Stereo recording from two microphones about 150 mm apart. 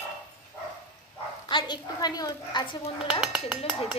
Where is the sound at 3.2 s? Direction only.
5° right (ahead or behind).